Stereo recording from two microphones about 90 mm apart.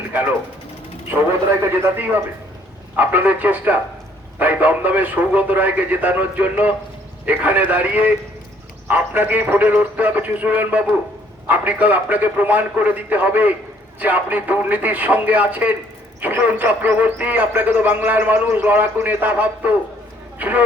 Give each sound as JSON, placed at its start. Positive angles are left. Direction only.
{"t": 0.1, "sound": "mechanisms", "side_deg": -20}
{"t": 1.1, "sound": "a man's voice", "side_deg": -25}